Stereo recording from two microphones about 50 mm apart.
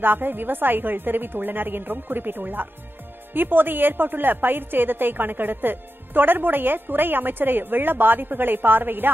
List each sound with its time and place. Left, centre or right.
0.0 s a woman's voice: right